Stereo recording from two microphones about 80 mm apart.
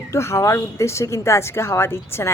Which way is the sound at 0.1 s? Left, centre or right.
Left.